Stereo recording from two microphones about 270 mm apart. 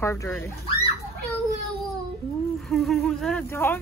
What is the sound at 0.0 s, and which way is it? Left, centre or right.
Speech, centre.